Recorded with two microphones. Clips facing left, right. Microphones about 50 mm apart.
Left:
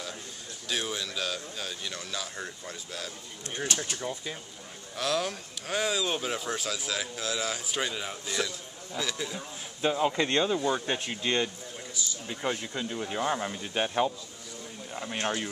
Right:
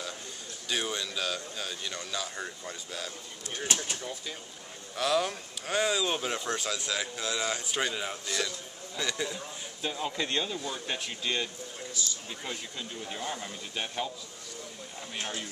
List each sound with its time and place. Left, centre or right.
0.7 s speech: centre
3.7 s speech: centre
4.0 s speech: left
4.9 s speech: centre
9.8 s speech: left
12.4 s speech: left
13.2 s speech: left
15.0 s speech: left